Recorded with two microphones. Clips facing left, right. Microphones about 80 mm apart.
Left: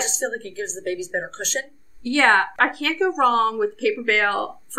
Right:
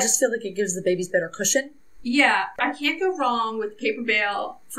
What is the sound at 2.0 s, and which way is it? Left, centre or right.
Speech, left.